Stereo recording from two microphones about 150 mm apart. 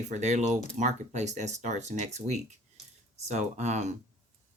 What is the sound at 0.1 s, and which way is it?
Speech, 50° right (ahead or behind).